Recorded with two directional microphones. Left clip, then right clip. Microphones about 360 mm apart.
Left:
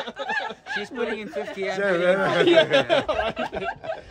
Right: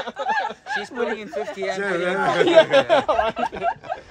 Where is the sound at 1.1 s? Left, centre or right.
Centre.